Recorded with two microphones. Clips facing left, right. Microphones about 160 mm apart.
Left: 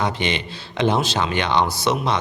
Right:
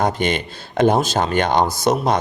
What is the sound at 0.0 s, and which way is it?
Speech, 45° right (ahead or behind).